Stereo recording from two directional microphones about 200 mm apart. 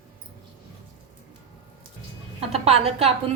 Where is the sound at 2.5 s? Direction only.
30° right (ahead or behind).